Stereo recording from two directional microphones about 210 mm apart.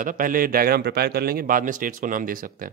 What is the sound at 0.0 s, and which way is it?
Speech, 40° right (ahead or behind).